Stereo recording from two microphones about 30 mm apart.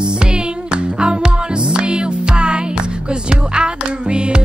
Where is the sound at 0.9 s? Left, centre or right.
Right.